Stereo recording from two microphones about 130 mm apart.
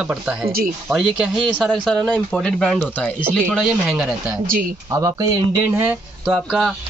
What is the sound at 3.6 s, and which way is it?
Speech, 5° right (ahead or behind).